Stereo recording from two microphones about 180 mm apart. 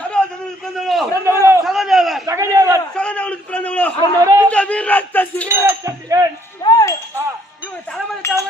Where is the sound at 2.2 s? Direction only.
15° right (ahead or behind).